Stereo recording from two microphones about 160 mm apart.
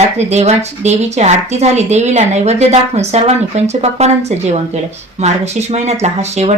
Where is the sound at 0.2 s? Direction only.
45° right (ahead or behind).